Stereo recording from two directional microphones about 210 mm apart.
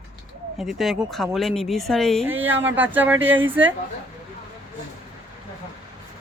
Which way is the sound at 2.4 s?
65° right (ahead or behind).